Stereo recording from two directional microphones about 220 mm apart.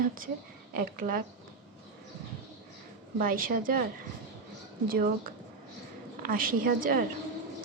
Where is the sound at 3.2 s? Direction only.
40° right (ahead or behind).